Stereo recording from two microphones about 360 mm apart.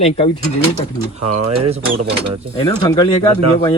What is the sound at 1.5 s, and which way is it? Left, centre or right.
Speech, centre.